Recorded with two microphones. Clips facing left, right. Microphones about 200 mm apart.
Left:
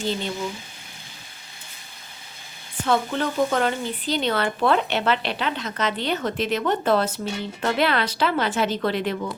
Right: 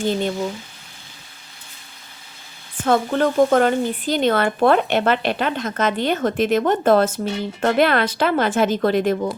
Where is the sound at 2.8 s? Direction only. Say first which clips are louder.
Right 5 dB; 50° right (ahead or behind).